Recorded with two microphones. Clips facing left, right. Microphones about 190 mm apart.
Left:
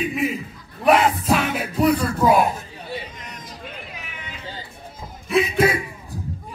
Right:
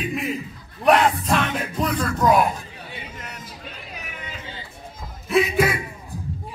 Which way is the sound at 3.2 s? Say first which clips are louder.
Right 1 dB; 5° right (ahead or behind).